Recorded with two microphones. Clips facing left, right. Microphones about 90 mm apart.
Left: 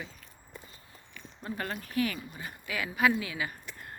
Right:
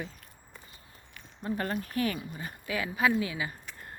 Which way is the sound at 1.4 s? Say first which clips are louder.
Right 4 dB; 30° right (ahead or behind).